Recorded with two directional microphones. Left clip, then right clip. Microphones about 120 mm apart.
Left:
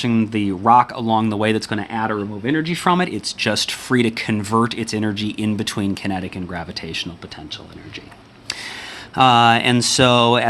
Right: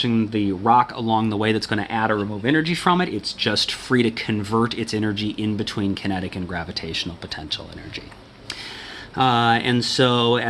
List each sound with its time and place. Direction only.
0.0 s speech: 50° left (ahead or behind); by 1.7 s 35° left (ahead or behind)
1.7 s speech: 15° left (ahead or behind)
2.8 s speech: 40° left (ahead or behind)
5.9 s speech: 30° left (ahead or behind)
9.1 s speech: 65° left (ahead or behind)